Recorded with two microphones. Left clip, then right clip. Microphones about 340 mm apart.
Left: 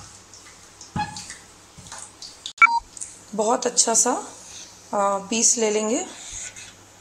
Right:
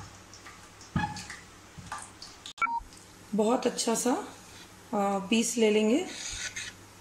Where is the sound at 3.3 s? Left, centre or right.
Left.